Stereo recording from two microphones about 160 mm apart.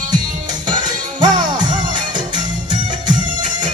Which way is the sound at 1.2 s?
30° right (ahead or behind).